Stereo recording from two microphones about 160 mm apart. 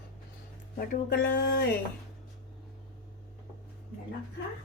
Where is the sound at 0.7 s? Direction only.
65° left (ahead or behind).